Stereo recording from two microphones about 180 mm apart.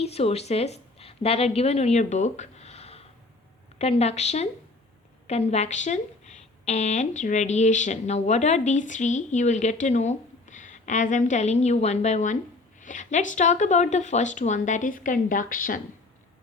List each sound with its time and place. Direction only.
0.0 s a woman's voice: 35° left (ahead or behind); by 15.8 s 50° left (ahead or behind)